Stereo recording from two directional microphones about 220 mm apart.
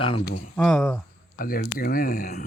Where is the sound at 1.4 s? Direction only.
40° left (ahead or behind).